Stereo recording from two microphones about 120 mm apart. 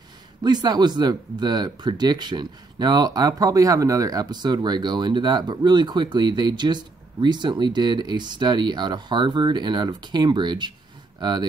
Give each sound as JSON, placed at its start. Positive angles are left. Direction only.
{"t": 0.4, "sound": "speech", "side_deg": -35}